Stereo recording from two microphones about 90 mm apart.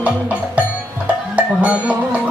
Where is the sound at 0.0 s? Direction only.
15° right (ahead or behind).